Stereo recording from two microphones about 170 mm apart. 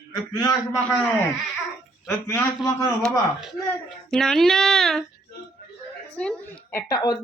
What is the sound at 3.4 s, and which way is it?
Speech, centre (ahead or behind).